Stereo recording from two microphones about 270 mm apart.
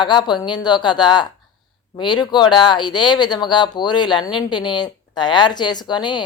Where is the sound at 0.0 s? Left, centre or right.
Centre.